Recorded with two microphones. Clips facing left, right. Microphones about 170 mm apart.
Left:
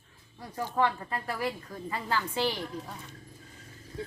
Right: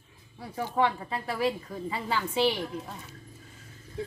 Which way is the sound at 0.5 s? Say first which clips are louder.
Right 1 dB; 15° right (ahead or behind).